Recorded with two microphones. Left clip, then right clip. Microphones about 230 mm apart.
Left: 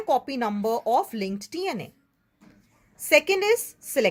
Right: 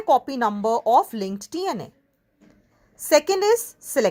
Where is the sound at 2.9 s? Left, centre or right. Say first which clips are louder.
Right 2 dB; centre.